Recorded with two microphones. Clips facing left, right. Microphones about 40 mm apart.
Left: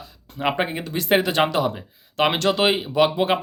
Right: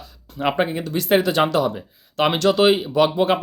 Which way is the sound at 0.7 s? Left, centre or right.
Left.